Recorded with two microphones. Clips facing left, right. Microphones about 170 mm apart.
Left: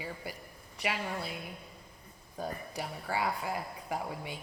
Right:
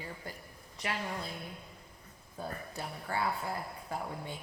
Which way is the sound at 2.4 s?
15° left (ahead or behind).